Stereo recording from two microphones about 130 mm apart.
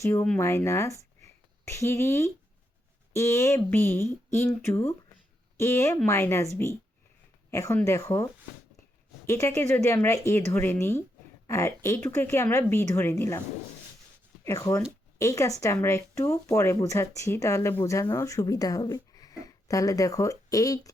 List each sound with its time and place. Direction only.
0.0 s speech: 20° left (ahead or behind)
14.4 s speech: 25° left (ahead or behind)